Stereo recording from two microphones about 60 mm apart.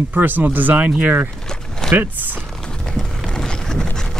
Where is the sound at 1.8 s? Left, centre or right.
Centre.